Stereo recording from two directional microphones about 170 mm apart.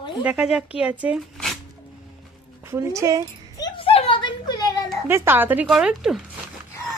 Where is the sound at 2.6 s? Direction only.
15° right (ahead or behind).